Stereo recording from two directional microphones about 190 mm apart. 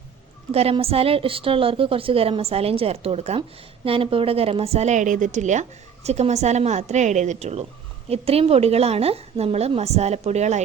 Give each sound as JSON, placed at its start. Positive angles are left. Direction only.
{"t": 0.5, "sound": "a woman's voice", "side_deg": -30}